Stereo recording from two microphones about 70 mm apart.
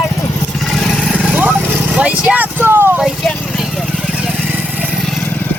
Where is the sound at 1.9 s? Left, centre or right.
Centre.